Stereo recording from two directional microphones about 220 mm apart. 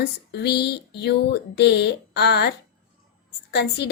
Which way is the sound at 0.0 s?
50° left (ahead or behind).